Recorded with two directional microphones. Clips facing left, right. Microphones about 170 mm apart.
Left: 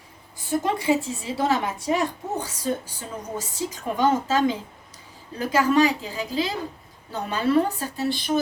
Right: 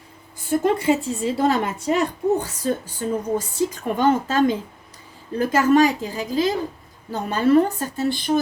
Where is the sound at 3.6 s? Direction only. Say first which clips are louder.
Even; 55° right (ahead or behind).